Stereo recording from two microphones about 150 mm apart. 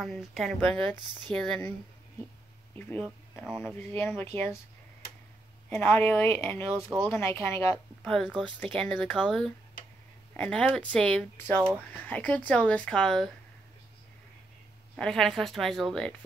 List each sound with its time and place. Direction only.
0.0 s speech: centre (ahead or behind)
2.7 s speech: 10° left (ahead or behind)
5.7 s speech: 15° left (ahead or behind)
8.0 s speech: 5° left (ahead or behind)
15.0 s speech: 5° left (ahead or behind)